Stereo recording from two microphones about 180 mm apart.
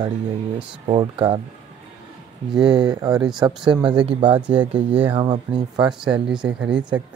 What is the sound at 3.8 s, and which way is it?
Speech, 5° right (ahead or behind).